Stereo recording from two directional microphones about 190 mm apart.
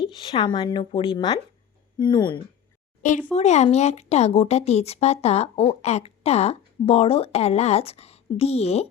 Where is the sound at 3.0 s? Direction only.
40° left (ahead or behind).